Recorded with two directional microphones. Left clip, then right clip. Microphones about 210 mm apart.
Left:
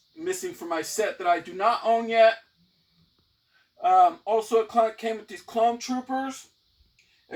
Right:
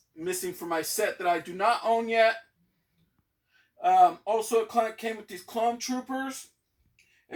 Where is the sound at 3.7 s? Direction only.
10° left (ahead or behind).